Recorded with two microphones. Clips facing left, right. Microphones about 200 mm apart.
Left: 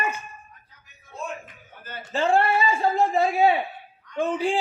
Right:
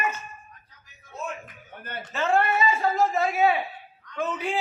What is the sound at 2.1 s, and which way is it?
A man's voice, 30° left (ahead or behind).